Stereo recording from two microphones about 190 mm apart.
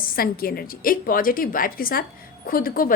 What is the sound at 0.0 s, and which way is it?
A woman's voice, 50° left (ahead or behind).